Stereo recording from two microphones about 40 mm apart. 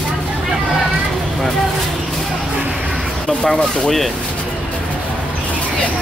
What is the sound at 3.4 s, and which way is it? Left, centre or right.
Speech, centre.